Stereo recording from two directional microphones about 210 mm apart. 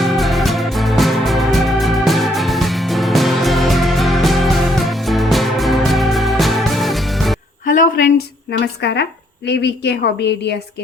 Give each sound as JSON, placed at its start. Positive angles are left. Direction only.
{"t": 0.0, "sound": "music", "side_deg": 0}
{"t": 7.6, "sound": "a sound", "side_deg": 40}
{"t": 8.4, "sound": "a woman's voice", "side_deg": 55}